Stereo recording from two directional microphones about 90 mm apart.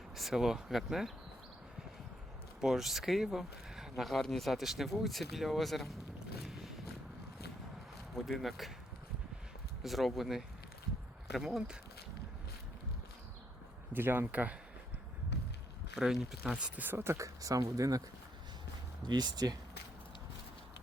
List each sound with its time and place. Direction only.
0.2 s speech: 5° right (ahead or behind)
2.6 s speech: 5° right (ahead or behind)
6.4 s a sound: centre (ahead or behind)
8.1 s speech: centre (ahead or behind)
9.8 s speech: centre (ahead or behind)
13.9 s speech: 25° right (ahead or behind)
16.0 s speech: 5° right (ahead or behind); by 18.0 s 40° right (ahead or behind)
19.0 s speech: 50° right (ahead or behind)